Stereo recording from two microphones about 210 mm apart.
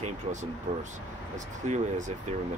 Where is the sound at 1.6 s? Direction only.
35° right (ahead or behind).